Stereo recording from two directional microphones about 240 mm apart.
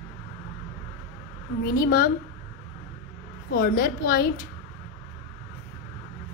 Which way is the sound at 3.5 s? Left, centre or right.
Left.